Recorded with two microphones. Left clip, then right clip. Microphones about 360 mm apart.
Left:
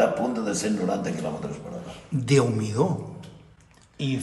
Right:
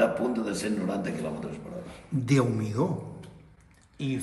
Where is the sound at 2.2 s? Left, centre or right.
Centre.